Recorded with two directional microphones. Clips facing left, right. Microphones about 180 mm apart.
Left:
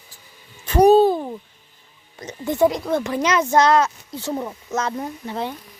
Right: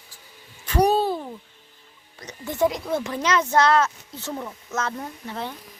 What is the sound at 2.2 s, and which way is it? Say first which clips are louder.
Speech: left 5 dB; 20° left (ahead or behind).